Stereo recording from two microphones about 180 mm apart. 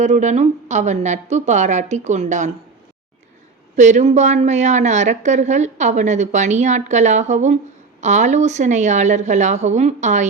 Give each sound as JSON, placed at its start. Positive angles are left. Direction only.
{"t": 0.0, "sound": "a woman's voice", "side_deg": -40}
{"t": 3.8, "sound": "a woman's voice", "side_deg": -40}